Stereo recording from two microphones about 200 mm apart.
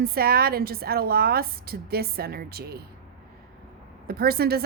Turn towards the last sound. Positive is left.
turn(degrees=-50)  # may be behind; listen again after turning